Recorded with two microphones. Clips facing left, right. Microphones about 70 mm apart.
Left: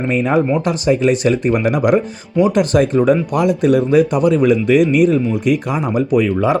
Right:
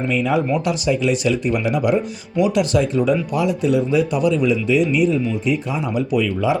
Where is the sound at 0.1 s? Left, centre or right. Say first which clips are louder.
Left 4 dB; left.